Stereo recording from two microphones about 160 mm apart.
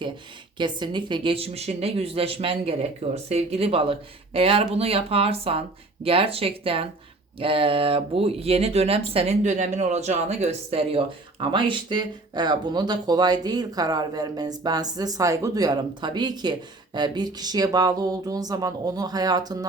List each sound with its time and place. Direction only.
0.6 s a woman's voice: 30° right (ahead or behind)